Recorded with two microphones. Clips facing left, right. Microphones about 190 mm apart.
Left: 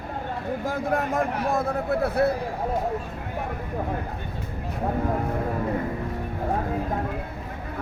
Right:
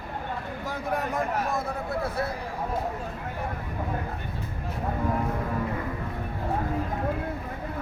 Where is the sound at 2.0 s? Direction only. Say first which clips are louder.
Left 9 dB; 60° left (ahead or behind).